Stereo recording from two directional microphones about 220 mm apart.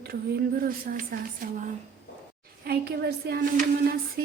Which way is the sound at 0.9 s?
45° right (ahead or behind).